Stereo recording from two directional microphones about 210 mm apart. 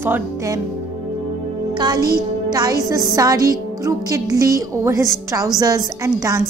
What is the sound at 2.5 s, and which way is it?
A woman's voice, 20° right (ahead or behind).